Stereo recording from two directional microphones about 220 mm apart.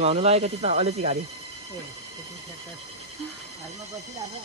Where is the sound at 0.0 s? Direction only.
30° right (ahead or behind).